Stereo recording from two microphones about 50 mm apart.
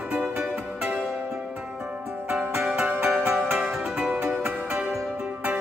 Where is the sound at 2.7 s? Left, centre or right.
Right.